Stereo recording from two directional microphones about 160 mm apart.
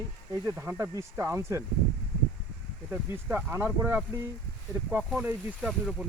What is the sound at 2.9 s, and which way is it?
Speech, 15° right (ahead or behind).